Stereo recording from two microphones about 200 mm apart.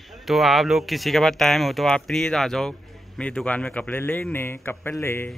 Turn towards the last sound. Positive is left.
turn(degrees=10)  # may be behind; listen again after turning